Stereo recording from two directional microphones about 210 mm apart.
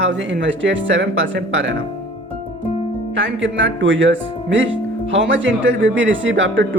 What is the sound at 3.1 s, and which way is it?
A woman's voice, 60° right (ahead or behind).